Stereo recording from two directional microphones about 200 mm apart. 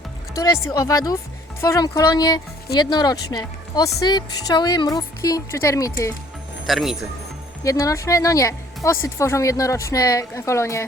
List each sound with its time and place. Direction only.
0.3 s speech: 15° left (ahead or behind)
6.7 s speech: centre (ahead or behind)
7.6 s speech: 15° left (ahead or behind)